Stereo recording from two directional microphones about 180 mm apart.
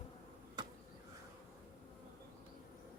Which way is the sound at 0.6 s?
25° right (ahead or behind).